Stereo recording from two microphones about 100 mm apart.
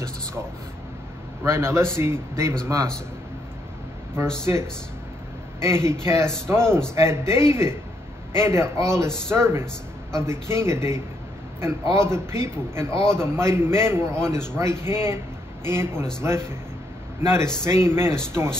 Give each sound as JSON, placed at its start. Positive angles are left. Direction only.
{"t": 1.4, "sound": "a man's voice", "side_deg": -25}
{"t": 4.5, "sound": "a man's voice", "side_deg": -30}